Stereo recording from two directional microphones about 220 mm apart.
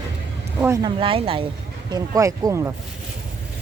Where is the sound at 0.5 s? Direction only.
10° right (ahead or behind).